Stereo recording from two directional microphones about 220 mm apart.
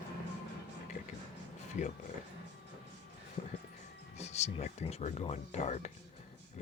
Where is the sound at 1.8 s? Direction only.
35° left (ahead or behind).